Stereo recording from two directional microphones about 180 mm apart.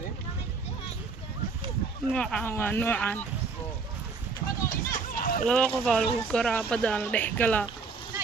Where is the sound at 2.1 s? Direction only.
5° left (ahead or behind).